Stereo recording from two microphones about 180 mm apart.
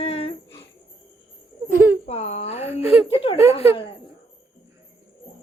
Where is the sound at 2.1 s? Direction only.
40° left (ahead or behind).